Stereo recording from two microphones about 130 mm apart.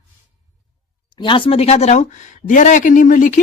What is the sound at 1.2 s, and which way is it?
Speech, 40° left (ahead or behind).